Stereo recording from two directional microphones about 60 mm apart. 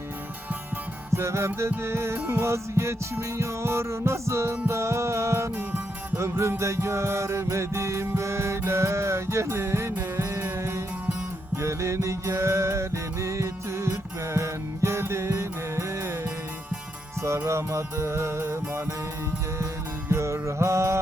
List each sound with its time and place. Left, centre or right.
1.1 s music: right
17.2 s music: right
20.1 s music: right